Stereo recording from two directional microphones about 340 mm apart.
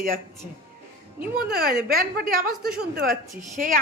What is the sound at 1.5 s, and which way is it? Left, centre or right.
Speech, right.